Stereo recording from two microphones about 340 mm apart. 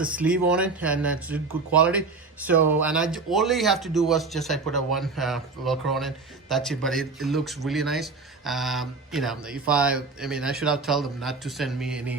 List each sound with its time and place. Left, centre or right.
0.0 s speech: centre